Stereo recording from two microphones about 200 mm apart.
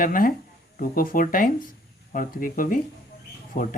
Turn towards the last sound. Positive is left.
turn(degrees=45)  # may be behind; listen again after turning